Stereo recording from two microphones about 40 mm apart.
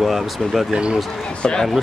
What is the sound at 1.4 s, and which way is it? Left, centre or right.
Speech, left.